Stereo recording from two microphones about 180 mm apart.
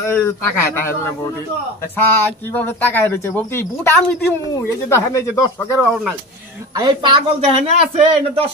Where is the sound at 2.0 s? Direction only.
10° left (ahead or behind).